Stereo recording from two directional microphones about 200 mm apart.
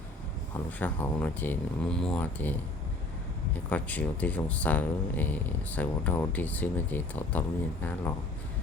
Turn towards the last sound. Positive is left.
turn(degrees=10)  # may be behind; listen again after turning